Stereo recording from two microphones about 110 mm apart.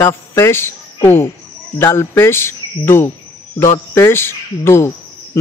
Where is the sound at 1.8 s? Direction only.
20° left (ahead or behind).